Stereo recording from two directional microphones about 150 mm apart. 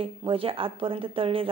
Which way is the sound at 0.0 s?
35° right (ahead or behind).